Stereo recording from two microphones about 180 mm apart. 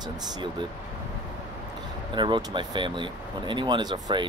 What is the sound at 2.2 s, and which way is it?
Speech, 25° right (ahead or behind).